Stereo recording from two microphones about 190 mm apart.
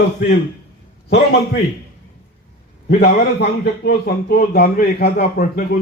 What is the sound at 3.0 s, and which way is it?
Speech, 60° left (ahead or behind).